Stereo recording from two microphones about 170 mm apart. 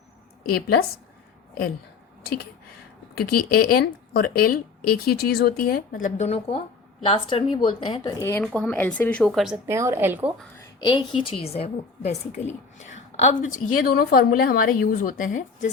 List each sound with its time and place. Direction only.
0.4 s speech: 65° left (ahead or behind)
3.2 s a woman's voice: 65° left (ahead or behind); by 8.1 s 30° left (ahead or behind)
8.2 s speech: 15° left (ahead or behind)
9.6 s a woman's voice: 15° right (ahead or behind)
10.6 s a woman's voice: 25° left (ahead or behind)
13.5 s speech: 55° left (ahead or behind)